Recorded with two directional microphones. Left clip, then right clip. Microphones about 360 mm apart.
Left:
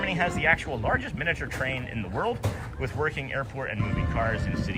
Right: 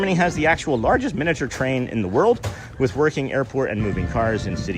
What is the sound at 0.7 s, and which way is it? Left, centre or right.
Speech, left.